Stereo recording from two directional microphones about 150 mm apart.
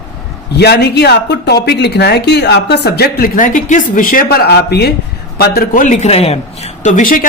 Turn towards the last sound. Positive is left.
turn(degrees=60)  # may be behind; listen again after turning